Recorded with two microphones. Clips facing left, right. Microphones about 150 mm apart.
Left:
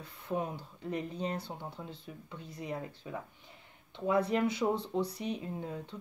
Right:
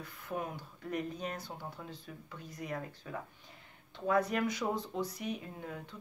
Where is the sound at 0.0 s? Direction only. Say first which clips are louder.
Left 4 dB; 30° left (ahead or behind).